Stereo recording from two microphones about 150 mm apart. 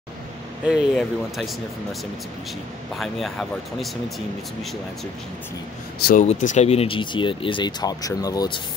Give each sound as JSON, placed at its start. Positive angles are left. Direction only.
{"t": 0.7, "sound": "speech", "side_deg": -5}
{"t": 3.0, "sound": "speech", "side_deg": 0}
{"t": 5.9, "sound": "speech", "side_deg": 90}
{"t": 6.2, "sound": "speech", "side_deg": 55}